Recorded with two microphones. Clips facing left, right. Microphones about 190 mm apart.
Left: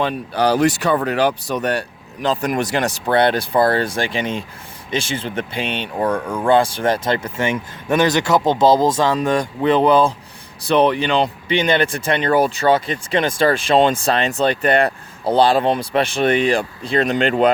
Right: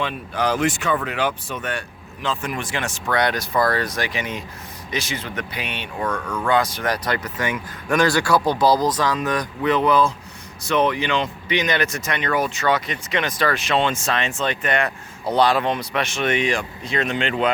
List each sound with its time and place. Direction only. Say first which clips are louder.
0.0 s speech: left 5 dB; 35° left (ahead or behind)